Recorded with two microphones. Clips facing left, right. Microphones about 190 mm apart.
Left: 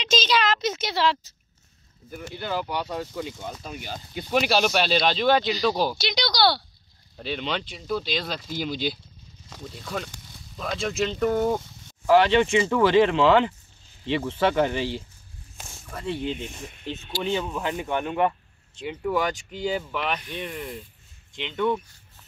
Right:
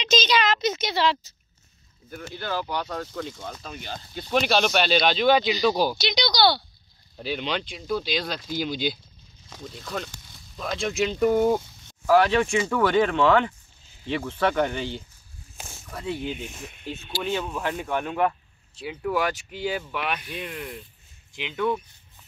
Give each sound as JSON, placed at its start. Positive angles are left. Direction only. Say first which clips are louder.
{"t": 0.0, "sound": "a sound", "louder": "right 1 dB", "side_deg": 5}
{"t": 2.0, "sound": "speech", "louder": "even", "side_deg": 10}
{"t": 13.1, "sound": "speech", "louder": "left 1 dB", "side_deg": 25}
{"t": 14.0, "sound": "speech", "louder": "left 2 dB", "side_deg": 0}